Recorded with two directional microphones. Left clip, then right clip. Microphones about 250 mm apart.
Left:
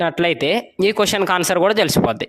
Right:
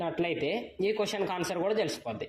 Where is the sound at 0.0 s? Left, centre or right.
Left.